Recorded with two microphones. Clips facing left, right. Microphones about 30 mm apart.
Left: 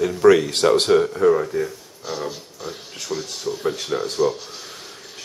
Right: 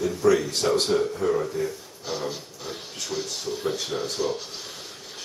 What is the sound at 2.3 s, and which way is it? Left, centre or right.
Speech, centre.